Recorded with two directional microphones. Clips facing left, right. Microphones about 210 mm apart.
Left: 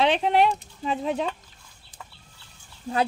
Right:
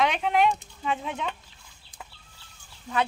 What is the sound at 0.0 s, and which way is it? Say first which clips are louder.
Speech: left 3 dB; 35° left (ahead or behind).